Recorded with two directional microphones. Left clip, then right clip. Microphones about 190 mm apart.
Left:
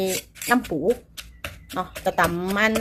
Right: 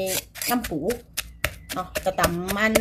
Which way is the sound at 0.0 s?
25° left (ahead or behind).